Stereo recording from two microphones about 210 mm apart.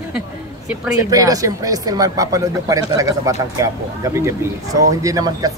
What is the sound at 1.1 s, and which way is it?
Speech, 15° right (ahead or behind).